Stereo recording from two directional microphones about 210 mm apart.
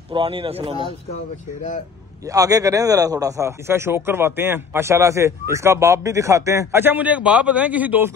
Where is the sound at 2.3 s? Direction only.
15° right (ahead or behind).